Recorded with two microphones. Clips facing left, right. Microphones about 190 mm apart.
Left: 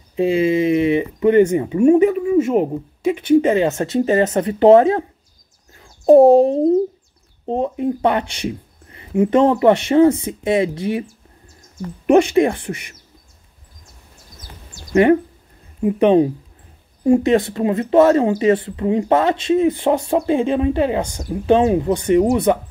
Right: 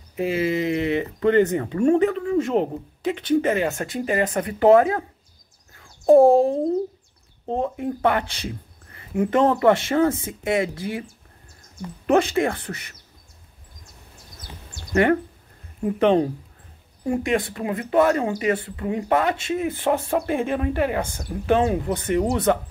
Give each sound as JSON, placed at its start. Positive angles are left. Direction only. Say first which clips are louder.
{"t": 0.1, "sound": "speech", "louder": "left 6 dB", "side_deg": 20}
{"t": 3.3, "sound": "a child's voice", "louder": "left 6 dB", "side_deg": 20}
{"t": 12.1, "sound": "speech", "louder": "left 6 dB", "side_deg": 15}
{"t": 15.8, "sound": "speech", "louder": "left 5 dB", "side_deg": 15}
{"t": 17.0, "sound": "speech", "louder": "left 8 dB", "side_deg": 25}